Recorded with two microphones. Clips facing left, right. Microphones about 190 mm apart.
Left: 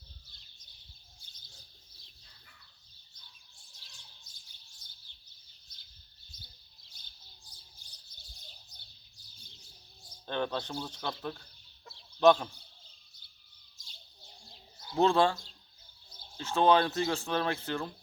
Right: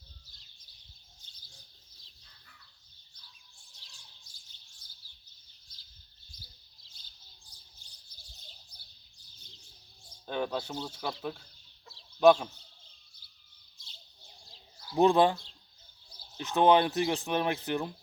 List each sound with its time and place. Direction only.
1.2 s bird: 10° left (ahead or behind)
10.2 s speech: 10° right (ahead or behind)
14.9 s speech: 15° right (ahead or behind)
16.4 s speech: 15° right (ahead or behind)